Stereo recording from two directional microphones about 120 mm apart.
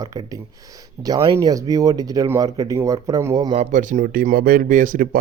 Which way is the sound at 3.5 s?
90° right.